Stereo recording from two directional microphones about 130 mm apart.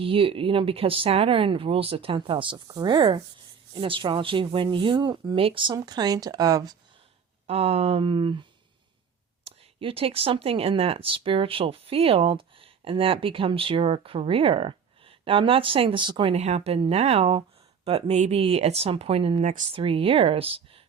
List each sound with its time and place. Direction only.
0.0 s speech: 45° right (ahead or behind)
5.7 s speech: 30° right (ahead or behind)
7.4 s speech: 50° right (ahead or behind)
9.8 s speech: 45° right (ahead or behind)
16.3 s speech: 55° right (ahead or behind)
19.4 s speech: 75° right (ahead or behind)
19.7 s speech: 45° right (ahead or behind)